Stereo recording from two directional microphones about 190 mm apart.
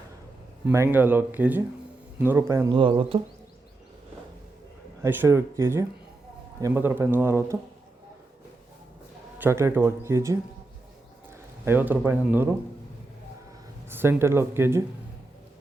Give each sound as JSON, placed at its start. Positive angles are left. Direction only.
{"t": 0.7, "sound": "a man's voice", "side_deg": -10}
{"t": 2.7, "sound": "speech", "side_deg": -25}
{"t": 5.0, "sound": "a man's voice", "side_deg": -15}
{"t": 9.4, "sound": "a man's voice", "side_deg": -15}
{"t": 13.9, "sound": "a man's voice", "side_deg": -10}